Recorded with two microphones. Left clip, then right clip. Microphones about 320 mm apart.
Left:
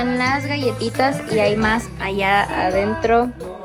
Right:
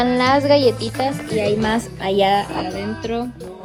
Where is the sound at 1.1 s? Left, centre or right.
Centre.